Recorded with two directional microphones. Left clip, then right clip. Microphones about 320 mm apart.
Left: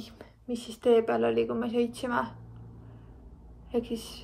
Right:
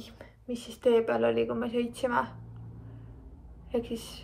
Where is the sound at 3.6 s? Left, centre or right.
Centre.